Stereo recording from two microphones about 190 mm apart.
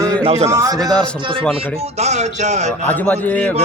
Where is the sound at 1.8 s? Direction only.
35° right (ahead or behind).